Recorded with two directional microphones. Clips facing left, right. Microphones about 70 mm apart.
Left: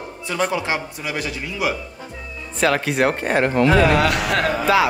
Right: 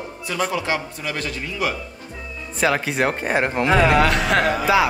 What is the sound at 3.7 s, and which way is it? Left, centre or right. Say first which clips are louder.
Speech: right 3 dB; right.